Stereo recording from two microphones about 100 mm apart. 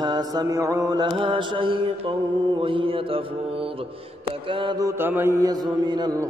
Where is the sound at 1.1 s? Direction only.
55° right (ahead or behind).